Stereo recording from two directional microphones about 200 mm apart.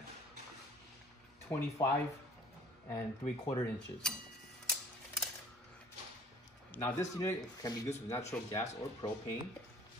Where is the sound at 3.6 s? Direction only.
5° left (ahead or behind).